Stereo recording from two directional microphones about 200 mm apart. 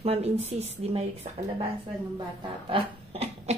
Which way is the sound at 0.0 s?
30° right (ahead or behind).